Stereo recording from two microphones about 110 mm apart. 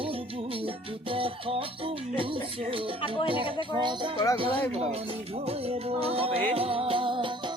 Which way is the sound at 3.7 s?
45° right (ahead or behind).